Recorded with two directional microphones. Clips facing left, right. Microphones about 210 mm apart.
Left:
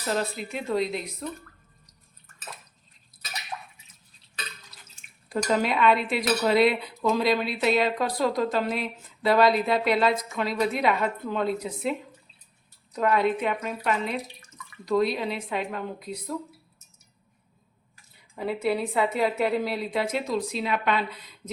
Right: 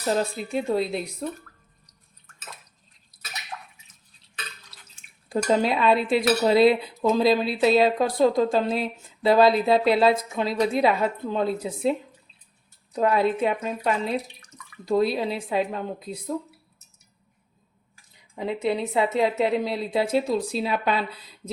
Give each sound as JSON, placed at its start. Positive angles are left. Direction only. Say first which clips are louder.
{"t": 0.5, "sound": "speech", "louder": "right 3 dB", "side_deg": -30}
{"t": 5.3, "sound": "a woman's voice", "louder": "right 3 dB", "side_deg": -30}
{"t": 18.3, "sound": "speech", "louder": "right 1 dB", "side_deg": -20}